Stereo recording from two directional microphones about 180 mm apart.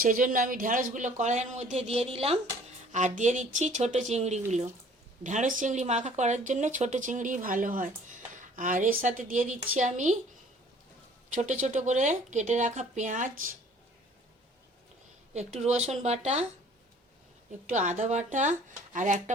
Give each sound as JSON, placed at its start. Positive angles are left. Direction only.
{"t": 0.0, "sound": "speech", "side_deg": -50}
{"t": 11.3, "sound": "speech", "side_deg": -40}
{"t": 15.3, "sound": "speech", "side_deg": -40}
{"t": 17.7, "sound": "speech", "side_deg": -40}